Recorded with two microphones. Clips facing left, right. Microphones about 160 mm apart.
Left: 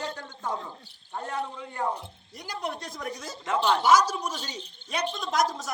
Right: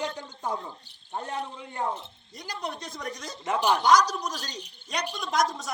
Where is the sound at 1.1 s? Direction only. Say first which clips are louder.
Left 1 dB; 20° right (ahead or behind).